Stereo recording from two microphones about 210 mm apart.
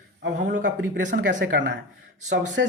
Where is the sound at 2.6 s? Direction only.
60° right (ahead or behind).